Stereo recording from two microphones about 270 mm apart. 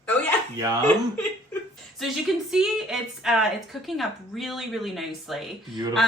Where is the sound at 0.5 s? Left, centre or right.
Centre.